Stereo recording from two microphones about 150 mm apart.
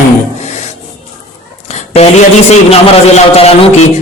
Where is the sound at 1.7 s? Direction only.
45° left (ahead or behind).